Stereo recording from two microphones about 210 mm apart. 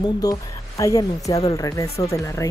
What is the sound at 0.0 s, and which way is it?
A woman's voice, 15° left (ahead or behind).